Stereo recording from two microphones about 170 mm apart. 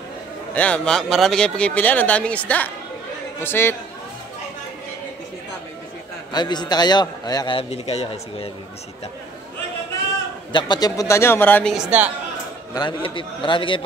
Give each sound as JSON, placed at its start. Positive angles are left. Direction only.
{"t": 0.6, "sound": "speech", "side_deg": 5}
{"t": 6.3, "sound": "a man's voice", "side_deg": 25}
{"t": 10.5, "sound": "speech", "side_deg": 25}
{"t": 12.7, "sound": "a man's voice", "side_deg": 30}